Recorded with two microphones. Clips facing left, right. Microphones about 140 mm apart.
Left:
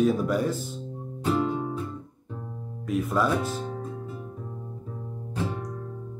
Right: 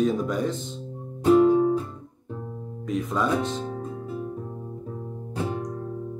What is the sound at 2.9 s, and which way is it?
Speech, 5° left (ahead or behind).